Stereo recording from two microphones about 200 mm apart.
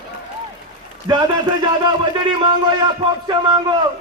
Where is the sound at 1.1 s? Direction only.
20° right (ahead or behind).